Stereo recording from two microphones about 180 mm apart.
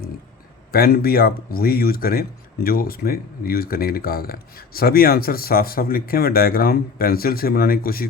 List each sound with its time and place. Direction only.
0.7 s speech: 55° left (ahead or behind)